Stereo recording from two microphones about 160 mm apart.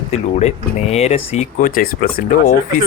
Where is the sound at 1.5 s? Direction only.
60° left (ahead or behind).